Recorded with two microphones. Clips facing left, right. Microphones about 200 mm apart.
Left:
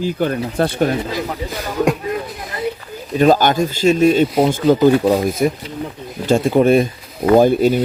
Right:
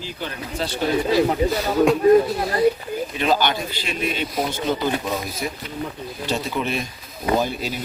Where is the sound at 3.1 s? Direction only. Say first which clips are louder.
Left 9 dB; 45° left (ahead or behind).